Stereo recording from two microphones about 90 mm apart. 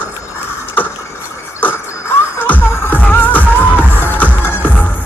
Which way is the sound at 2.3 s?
20° left (ahead or behind).